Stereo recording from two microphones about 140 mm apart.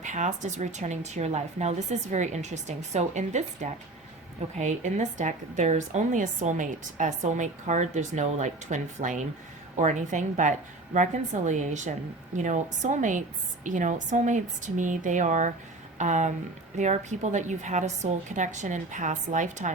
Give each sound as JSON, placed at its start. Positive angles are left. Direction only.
{"t": 0.0, "sound": "a woman's voice", "side_deg": -60}